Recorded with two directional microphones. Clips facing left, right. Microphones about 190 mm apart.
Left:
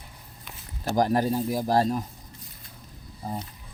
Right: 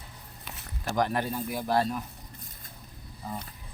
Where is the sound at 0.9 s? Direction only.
35° left (ahead or behind).